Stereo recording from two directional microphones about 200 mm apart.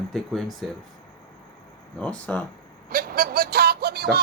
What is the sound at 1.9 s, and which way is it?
Speech, 5° left (ahead or behind).